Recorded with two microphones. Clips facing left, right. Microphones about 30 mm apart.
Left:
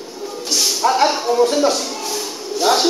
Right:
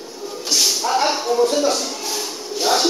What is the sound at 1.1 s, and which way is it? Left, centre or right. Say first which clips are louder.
Music: left 2 dB; centre.